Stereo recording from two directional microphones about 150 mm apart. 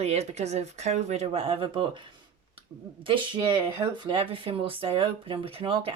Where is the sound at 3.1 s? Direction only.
30° right (ahead or behind).